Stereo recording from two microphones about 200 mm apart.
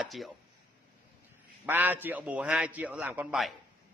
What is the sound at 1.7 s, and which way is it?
A man's voice, 10° right (ahead or behind).